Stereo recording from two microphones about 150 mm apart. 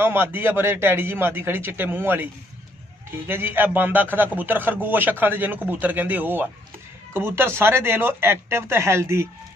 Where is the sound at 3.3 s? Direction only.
15° right (ahead or behind).